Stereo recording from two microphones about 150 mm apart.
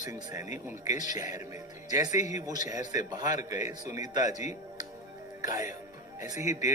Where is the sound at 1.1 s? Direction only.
25° right (ahead or behind).